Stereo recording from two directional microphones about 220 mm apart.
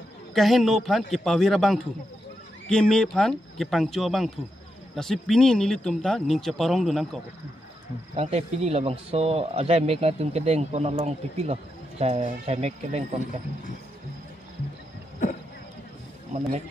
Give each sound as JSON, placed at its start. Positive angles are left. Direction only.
{"t": 0.3, "sound": "speech", "side_deg": 0}
{"t": 8.2, "sound": "speech", "side_deg": -30}